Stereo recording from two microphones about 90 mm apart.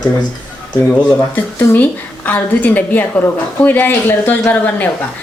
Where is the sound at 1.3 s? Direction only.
25° left (ahead or behind).